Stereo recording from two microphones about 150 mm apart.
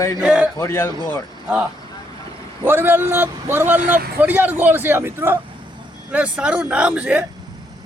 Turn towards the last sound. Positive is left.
turn(degrees=-10)  # may be behind; listen again after turning